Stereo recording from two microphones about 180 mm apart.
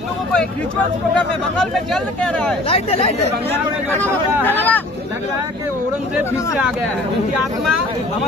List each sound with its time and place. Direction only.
2.7 s speech: 35° left (ahead or behind)
3.9 s speech: 10° left (ahead or behind)